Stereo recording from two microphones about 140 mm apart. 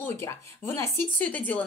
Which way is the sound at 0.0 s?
15° left (ahead or behind).